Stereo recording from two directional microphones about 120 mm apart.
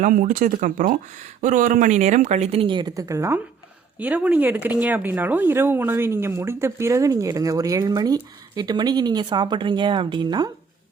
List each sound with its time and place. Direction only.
0.0 s speech: 90° right; by 3.4 s 25° right (ahead or behind)
3.9 s speech: 10° right (ahead or behind); by 10.5 s 35° right (ahead or behind)